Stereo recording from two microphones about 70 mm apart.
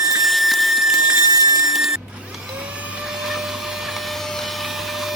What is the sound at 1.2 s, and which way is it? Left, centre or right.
Water, right.